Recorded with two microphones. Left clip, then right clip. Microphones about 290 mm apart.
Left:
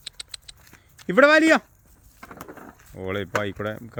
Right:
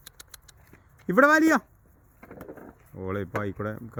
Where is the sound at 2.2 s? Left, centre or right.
Left.